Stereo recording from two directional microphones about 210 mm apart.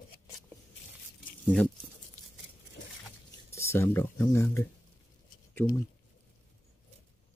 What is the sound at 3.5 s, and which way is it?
Speech, 10° left (ahead or behind).